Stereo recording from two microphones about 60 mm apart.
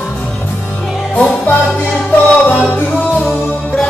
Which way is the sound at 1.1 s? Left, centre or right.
Left.